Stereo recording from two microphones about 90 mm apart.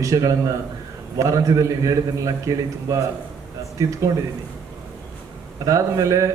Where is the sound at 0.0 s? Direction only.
40° right (ahead or behind).